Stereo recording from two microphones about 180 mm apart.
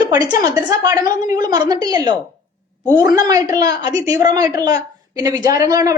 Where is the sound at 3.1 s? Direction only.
20° right (ahead or behind).